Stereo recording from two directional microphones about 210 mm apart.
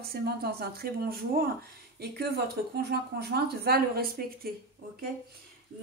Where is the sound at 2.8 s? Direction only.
50° right (ahead or behind).